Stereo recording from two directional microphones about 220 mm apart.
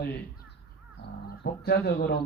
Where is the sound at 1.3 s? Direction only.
45° left (ahead or behind).